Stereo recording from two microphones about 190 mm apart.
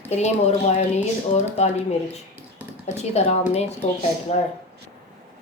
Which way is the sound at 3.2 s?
35° left (ahead or behind).